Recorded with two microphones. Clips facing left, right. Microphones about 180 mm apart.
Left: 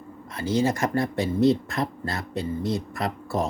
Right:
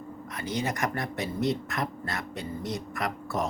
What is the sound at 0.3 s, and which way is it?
Speech, 30° left (ahead or behind).